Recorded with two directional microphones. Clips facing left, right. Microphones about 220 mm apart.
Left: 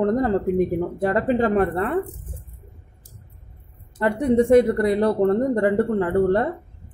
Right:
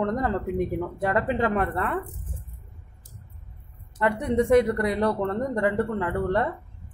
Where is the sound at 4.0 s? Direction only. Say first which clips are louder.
Left 5 dB; 30° left (ahead or behind).